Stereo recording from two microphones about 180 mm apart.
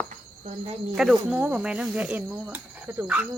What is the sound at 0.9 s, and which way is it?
Speech, 5° right (ahead or behind).